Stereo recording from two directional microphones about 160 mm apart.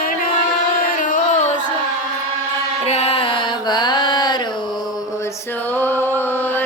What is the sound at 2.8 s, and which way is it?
Carnatic music, 40° left (ahead or behind).